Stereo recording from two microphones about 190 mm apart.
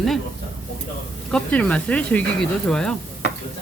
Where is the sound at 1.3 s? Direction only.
5° left (ahead or behind).